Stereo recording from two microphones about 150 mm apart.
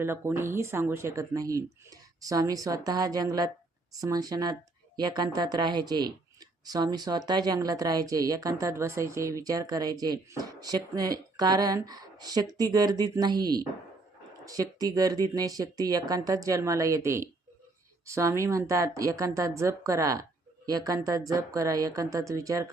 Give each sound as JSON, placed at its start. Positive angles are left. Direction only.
{"t": 0.0, "sound": "speech", "side_deg": -15}